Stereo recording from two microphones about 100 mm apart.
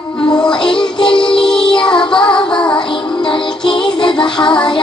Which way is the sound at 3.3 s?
55° left (ahead or behind).